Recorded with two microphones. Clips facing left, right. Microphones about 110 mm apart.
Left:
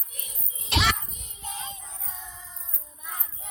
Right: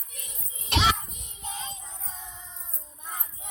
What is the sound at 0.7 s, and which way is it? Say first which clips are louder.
Children playing: right 1 dB; 30° right (ahead or behind).